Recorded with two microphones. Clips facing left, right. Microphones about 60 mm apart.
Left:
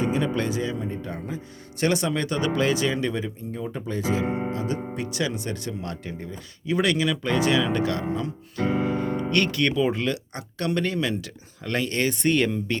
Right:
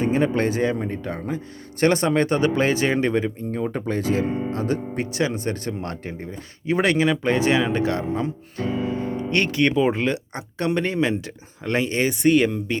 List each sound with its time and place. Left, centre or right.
0.0 s speech: right
1.8 s speech: right
5.1 s speech: right
8.6 s music: left
9.3 s speech: right